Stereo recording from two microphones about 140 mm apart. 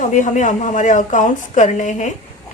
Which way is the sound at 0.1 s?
60° left (ahead or behind).